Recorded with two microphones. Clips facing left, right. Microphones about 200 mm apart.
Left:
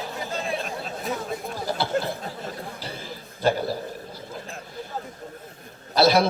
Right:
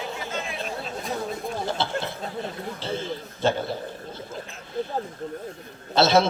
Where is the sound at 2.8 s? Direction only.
25° right (ahead or behind).